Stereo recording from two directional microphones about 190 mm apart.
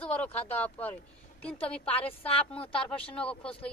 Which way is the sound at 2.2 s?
30° left (ahead or behind).